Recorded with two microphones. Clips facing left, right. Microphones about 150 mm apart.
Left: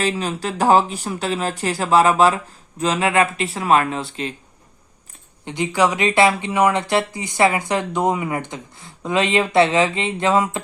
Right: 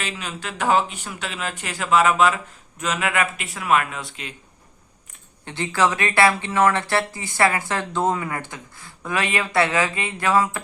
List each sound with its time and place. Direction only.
0.0 s speech: 35° left (ahead or behind)
5.5 s speech: 15° left (ahead or behind)